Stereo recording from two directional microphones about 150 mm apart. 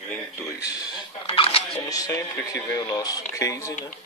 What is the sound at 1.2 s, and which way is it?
Speech, 40° left (ahead or behind).